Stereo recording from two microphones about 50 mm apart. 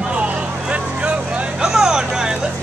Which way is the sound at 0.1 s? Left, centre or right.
Right.